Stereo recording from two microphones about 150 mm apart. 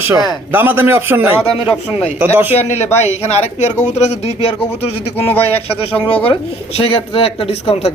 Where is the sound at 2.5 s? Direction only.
45° left (ahead or behind).